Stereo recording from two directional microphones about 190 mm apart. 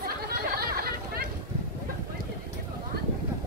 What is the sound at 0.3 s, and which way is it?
Chatter, 55° right (ahead or behind).